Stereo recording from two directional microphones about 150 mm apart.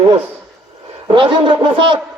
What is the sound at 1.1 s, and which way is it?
Speech, 35° right (ahead or behind).